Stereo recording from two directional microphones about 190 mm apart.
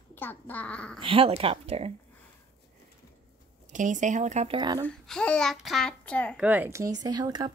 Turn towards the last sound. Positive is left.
turn(degrees=-20)  # may be behind; listen again after turning